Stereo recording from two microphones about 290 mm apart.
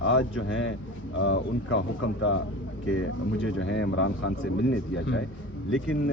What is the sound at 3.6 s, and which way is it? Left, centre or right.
Speech, left.